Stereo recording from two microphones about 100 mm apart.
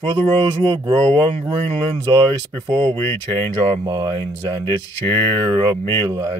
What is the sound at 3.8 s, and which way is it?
Mantra, 45° right (ahead or behind).